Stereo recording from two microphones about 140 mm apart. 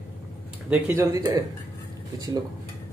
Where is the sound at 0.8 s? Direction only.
20° right (ahead or behind).